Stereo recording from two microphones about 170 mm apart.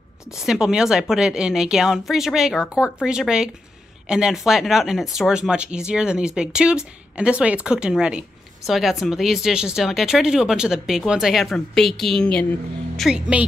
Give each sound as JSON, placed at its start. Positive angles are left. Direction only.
{"t": 0.4, "sound": "speech", "side_deg": -5}